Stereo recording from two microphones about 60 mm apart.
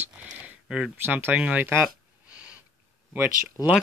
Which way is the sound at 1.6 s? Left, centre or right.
Right.